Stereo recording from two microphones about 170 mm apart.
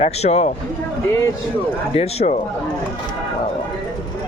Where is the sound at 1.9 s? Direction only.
35° left (ahead or behind).